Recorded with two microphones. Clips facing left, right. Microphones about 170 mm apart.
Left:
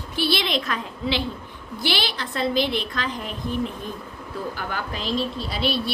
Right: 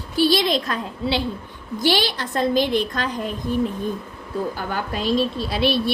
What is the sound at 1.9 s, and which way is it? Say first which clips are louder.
Child singing: right 5 dB; 45° right (ahead or behind).